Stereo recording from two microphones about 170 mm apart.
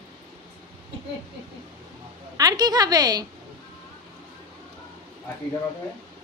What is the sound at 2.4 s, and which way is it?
Speech, 25° right (ahead or behind).